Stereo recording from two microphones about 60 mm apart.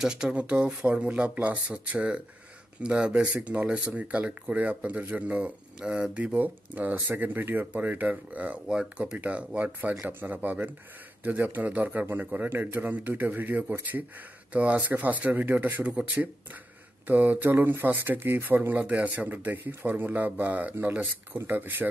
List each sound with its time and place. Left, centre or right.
0.0 s speech: centre
6.1 s speech: right
18.8 s speech: right
19.0 s speech: right